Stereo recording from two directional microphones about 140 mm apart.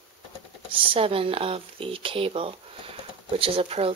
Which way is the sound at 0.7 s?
40° right (ahead or behind).